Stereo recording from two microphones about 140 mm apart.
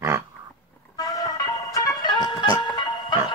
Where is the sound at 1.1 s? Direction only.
25° left (ahead or behind).